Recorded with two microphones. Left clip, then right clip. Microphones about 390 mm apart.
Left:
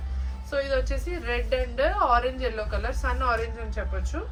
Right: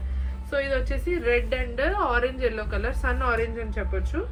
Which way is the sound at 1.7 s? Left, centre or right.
Centre.